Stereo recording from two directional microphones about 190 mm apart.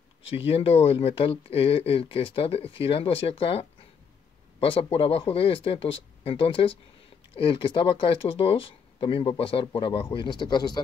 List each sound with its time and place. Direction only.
0.5 s speech: 30° left (ahead or behind)